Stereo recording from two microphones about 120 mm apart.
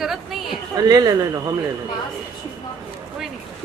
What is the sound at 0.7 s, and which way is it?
Speech, 35° right (ahead or behind).